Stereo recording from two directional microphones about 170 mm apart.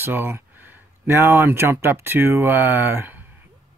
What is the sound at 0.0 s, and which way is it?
Speech, 10° right (ahead or behind).